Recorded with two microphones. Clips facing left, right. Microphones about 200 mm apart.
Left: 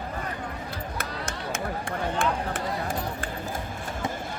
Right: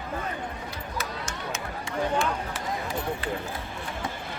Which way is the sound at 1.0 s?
55° left (ahead or behind).